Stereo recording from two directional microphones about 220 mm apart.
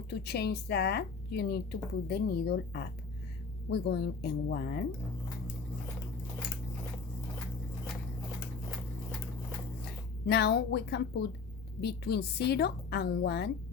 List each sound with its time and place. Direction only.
0.1 s a woman's voice: 50° left (ahead or behind)
10.2 s a woman's voice: 50° left (ahead or behind)